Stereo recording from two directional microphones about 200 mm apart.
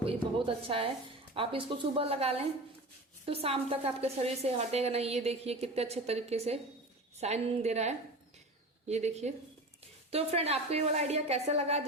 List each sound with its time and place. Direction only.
0.0 s a woman's voice: 25° right (ahead or behind)